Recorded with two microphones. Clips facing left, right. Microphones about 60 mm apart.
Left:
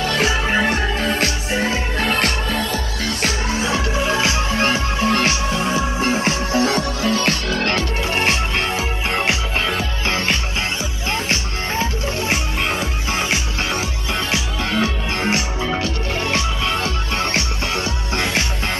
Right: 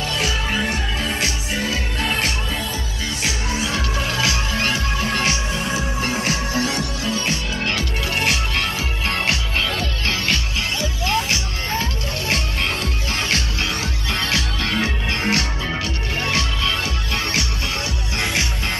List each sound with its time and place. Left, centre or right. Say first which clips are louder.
0.0 s music: left 4 dB; left
3.6 s music: left 5 dB; left
7.2 s music: left 4 dB; left
7.7 s music: left 3 dB; left
11.8 s music: left 4 dB; centre